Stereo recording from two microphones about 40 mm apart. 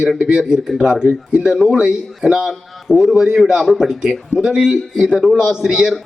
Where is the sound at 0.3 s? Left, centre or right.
Right.